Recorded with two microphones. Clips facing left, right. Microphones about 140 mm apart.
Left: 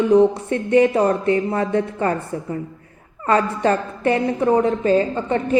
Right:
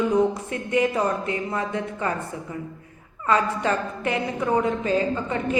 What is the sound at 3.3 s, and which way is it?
Speech, 40° left (ahead or behind).